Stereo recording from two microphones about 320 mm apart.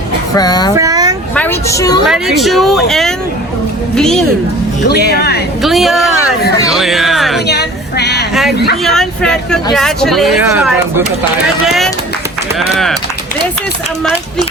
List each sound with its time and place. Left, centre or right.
0.3 s a woman's voice: centre
0.8 s a sound: centre
1.4 s a woman's voice: centre
2.0 s speech: centre
5.0 s speech: left
5.6 s speech: centre
7.4 s a sound: left
8.3 s speech: centre
11.6 s a sound: centre
12.5 s speech: centre